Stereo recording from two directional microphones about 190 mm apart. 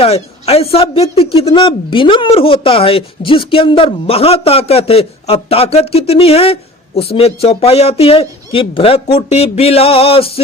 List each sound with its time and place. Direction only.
0.0 s speech: 30° left (ahead or behind)